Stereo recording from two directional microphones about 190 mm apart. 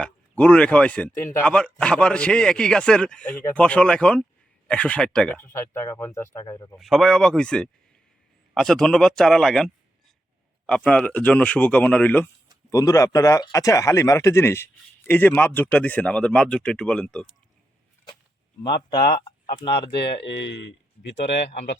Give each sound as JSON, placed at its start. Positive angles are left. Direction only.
{"t": 0.0, "sound": "speech", "side_deg": 5}
{"t": 6.7, "sound": "speech", "side_deg": 0}
{"t": 18.6, "sound": "speech", "side_deg": 25}
{"t": 20.2, "sound": "speech", "side_deg": 65}